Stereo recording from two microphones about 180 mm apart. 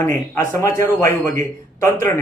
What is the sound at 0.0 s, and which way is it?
Speech, 15° left (ahead or behind).